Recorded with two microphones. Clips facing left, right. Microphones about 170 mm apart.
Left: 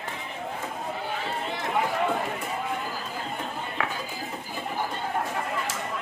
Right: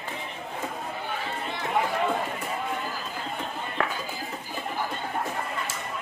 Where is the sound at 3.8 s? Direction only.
50° right (ahead or behind).